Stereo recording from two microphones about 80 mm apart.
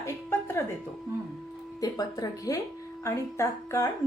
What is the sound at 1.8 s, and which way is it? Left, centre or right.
Speech, left.